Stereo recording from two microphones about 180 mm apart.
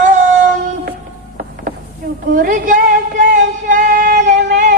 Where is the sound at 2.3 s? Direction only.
50° right (ahead or behind).